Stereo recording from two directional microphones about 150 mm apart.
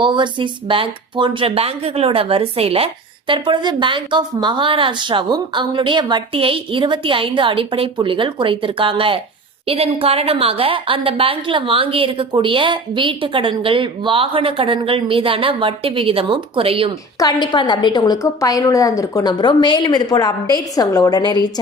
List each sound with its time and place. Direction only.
0.0 s speech: 30° right (ahead or behind)
17.2 s a woman's voice: 30° left (ahead or behind)